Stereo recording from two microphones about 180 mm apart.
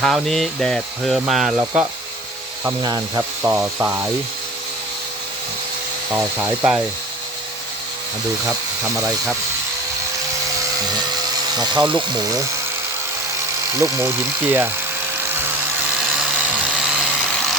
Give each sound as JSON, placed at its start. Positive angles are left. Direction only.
{"t": 0.0, "sound": "speech", "side_deg": 0}
{"t": 1.5, "sound": "speech", "side_deg": -15}
{"t": 6.1, "sound": "speech", "side_deg": -10}
{"t": 9.0, "sound": "speech", "side_deg": -15}
{"t": 11.5, "sound": "speech", "side_deg": -25}
{"t": 13.7, "sound": "speech", "side_deg": -15}
{"t": 15.3, "sound": "music", "side_deg": -10}
{"t": 16.0, "sound": "dental drill", "side_deg": -5}